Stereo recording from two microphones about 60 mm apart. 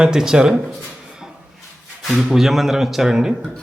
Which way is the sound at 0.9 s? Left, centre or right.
Centre.